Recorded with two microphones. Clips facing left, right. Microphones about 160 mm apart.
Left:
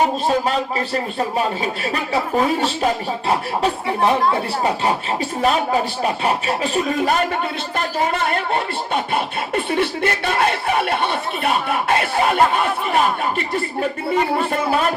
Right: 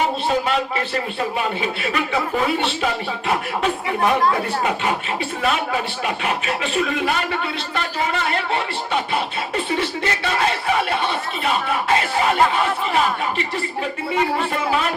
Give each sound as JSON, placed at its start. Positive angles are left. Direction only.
{"t": 1.4, "sound": "speech", "side_deg": 40}